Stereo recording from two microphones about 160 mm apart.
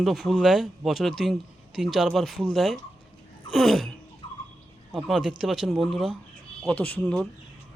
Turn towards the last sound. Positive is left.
turn(degrees=5)  # may be behind; listen again after turning